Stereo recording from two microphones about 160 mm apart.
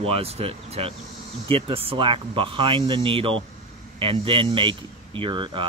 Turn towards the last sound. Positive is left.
turn(degrees=-30)  # may be behind; listen again after turning